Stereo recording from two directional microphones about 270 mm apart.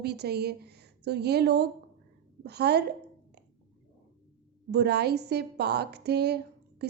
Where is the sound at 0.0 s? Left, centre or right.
Right.